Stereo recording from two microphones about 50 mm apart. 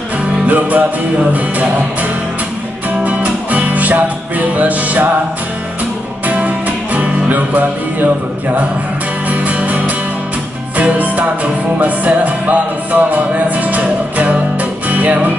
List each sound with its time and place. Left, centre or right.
0.5 s music: right
3.1 s music: right
6.2 s music: right